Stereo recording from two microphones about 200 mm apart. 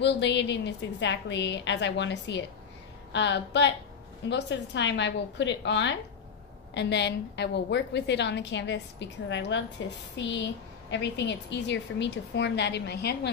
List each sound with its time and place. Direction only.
0.0 s a woman's voice: 60° left (ahead or behind)